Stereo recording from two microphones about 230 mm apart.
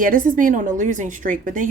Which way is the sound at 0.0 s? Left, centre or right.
Right.